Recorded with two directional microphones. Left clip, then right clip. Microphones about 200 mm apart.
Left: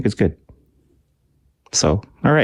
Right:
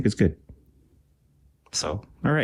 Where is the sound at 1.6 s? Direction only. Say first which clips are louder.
Left 11 dB; 35° left (ahead or behind).